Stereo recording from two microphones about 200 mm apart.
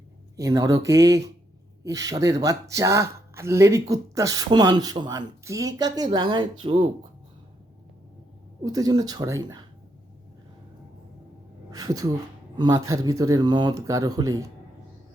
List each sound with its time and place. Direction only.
0.3 s speech: 15° right (ahead or behind)
8.6 s speech: 20° right (ahead or behind)
11.7 s speech: 20° right (ahead or behind)